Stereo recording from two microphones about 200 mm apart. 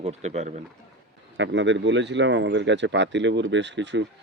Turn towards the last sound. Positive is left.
turn(degrees=-60)  # may be behind; listen again after turning